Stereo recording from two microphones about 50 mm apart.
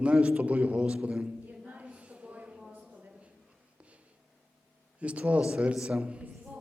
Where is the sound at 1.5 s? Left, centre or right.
Right.